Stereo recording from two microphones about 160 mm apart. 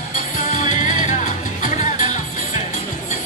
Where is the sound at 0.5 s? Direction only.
50° left (ahead or behind).